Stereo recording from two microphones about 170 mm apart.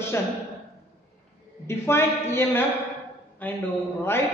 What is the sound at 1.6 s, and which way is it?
A man's voice, 15° left (ahead or behind).